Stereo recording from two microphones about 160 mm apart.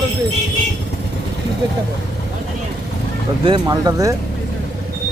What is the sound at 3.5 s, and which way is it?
Speech, 25° right (ahead or behind).